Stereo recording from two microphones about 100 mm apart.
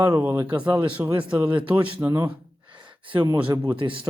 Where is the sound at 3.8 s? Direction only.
60° right (ahead or behind).